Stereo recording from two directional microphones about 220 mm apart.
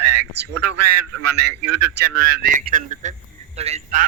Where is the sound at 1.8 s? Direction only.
40° right (ahead or behind).